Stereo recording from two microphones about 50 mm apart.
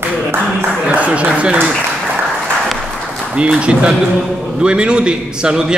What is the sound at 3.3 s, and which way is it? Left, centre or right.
A man's voice, right.